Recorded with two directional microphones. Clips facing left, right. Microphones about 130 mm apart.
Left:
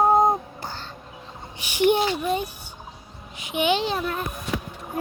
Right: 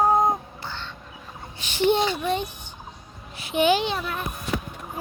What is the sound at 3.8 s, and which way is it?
Speech, 40° left (ahead or behind).